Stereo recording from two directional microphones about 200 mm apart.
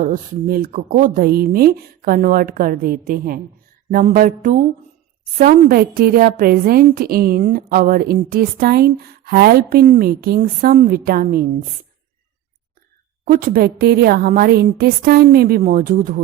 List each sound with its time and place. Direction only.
0.0 s a woman's voice: 45° right (ahead or behind)
13.2 s a woman's voice: 45° right (ahead or behind)